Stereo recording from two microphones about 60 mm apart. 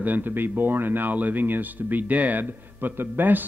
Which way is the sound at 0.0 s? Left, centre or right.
Right.